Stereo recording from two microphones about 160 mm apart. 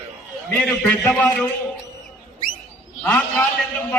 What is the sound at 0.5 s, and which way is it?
Speech, 5° left (ahead or behind).